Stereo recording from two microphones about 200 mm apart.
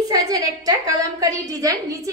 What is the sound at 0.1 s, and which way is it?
A woman's voice, 20° right (ahead or behind).